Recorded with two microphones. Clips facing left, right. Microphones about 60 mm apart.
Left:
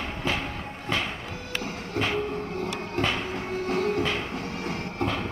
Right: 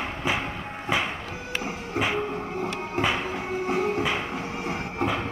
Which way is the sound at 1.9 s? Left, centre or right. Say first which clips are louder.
Right 1 dB; centre.